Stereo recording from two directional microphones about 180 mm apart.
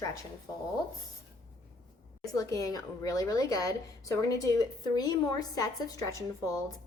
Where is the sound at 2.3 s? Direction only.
20° left (ahead or behind).